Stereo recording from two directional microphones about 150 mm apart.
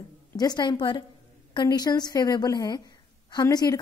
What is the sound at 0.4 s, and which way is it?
A woman's voice, 30° left (ahead or behind).